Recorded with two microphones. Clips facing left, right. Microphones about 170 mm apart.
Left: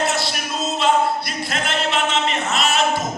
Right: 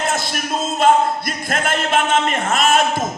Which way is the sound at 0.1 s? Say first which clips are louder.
Right 2 dB; 50° right (ahead or behind).